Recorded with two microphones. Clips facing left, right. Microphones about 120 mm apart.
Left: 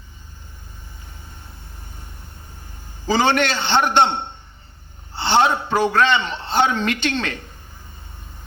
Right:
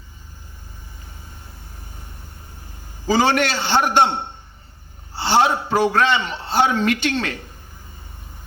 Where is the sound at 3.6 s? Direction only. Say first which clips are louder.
Even; 25° left (ahead or behind).